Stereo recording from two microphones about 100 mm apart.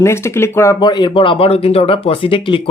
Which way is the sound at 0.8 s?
45° left (ahead or behind).